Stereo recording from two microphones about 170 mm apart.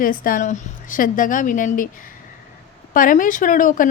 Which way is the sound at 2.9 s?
55° left (ahead or behind).